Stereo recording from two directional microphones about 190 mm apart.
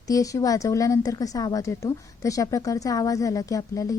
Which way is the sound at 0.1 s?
15° left (ahead or behind).